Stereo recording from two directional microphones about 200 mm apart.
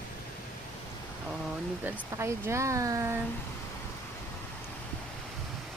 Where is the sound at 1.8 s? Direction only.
15° right (ahead or behind).